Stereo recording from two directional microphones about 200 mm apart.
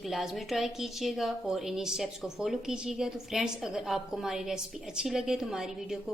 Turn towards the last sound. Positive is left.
turn(degrees=0)  # may be behind; listen again after turning